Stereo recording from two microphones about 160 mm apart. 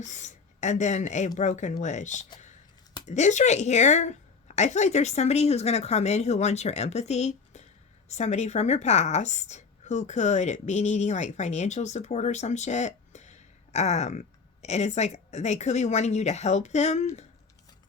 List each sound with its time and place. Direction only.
0.0 s a woman's voice: 50° left (ahead or behind)